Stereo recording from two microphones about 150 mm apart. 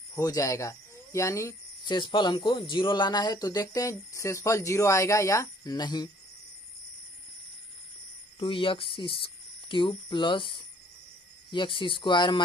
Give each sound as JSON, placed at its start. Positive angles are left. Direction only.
{"t": 0.1, "sound": "speech", "side_deg": 25}
{"t": 1.9, "sound": "speech", "side_deg": 30}
{"t": 8.4, "sound": "speech", "side_deg": 35}